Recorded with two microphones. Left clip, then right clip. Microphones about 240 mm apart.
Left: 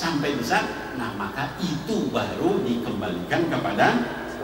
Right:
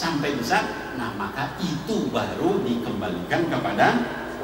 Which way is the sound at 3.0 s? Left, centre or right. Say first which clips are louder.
Even; centre.